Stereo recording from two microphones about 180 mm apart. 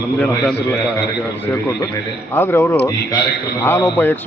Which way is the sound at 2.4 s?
10° left (ahead or behind).